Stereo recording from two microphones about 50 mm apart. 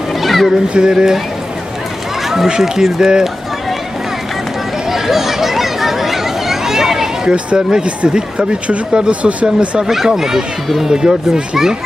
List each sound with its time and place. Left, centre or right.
0.1 s a sound: centre
0.7 s a child's voice: centre
2.2 s run: centre
2.5 s a child's voice: centre
4.9 s a sound: centre
7.3 s speech: centre
9.8 s a child's voice: centre